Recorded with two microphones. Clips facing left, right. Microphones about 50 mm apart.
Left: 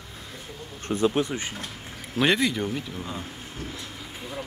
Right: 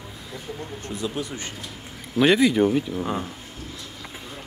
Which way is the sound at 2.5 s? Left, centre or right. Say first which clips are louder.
Right 9 dB; centre.